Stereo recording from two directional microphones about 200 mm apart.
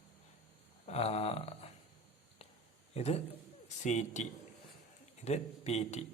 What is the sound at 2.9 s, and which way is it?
A man's voice, 30° left (ahead or behind).